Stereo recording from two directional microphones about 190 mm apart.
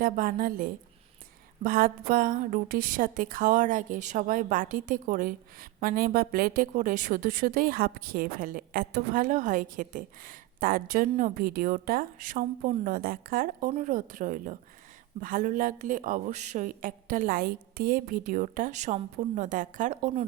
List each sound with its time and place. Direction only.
0.0 s a woman's voice: 50° right (ahead or behind)